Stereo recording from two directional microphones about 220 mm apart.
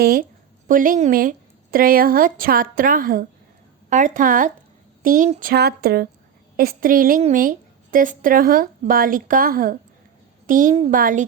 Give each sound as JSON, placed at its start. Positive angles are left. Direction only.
{"t": 0.0, "sound": "a woman's voice", "side_deg": -45}